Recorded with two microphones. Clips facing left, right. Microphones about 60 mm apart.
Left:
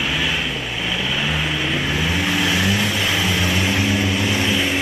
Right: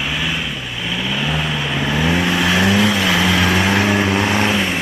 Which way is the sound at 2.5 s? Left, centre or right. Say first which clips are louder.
Right 5 dB; right.